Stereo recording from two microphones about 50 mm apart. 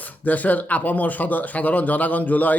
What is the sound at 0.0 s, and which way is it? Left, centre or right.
Speech, left.